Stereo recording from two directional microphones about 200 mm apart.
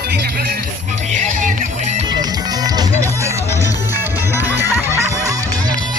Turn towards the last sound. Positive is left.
turn(degrees=-20)  # may be behind; listen again after turning